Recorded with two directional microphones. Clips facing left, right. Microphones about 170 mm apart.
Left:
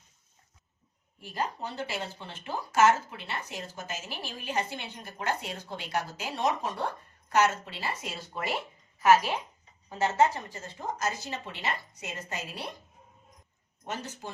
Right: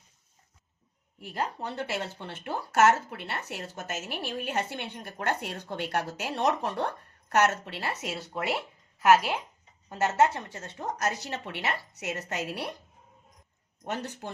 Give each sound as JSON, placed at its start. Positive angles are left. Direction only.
{"t": 1.2, "sound": "a woman's voice", "side_deg": -60}
{"t": 10.0, "sound": "a woman's voice", "side_deg": -65}
{"t": 13.8, "sound": "speech", "side_deg": -60}